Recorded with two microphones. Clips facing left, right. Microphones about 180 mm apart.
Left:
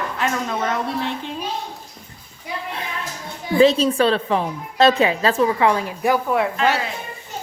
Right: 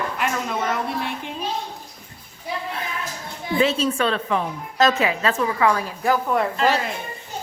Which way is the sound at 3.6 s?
35° left (ahead or behind).